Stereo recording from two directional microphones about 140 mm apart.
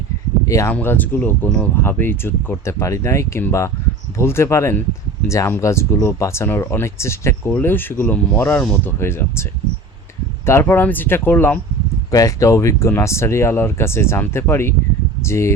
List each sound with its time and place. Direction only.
0.4 s speech: 20° left (ahead or behind)